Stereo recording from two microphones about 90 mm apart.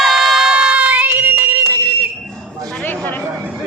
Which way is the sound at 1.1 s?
25° right (ahead or behind).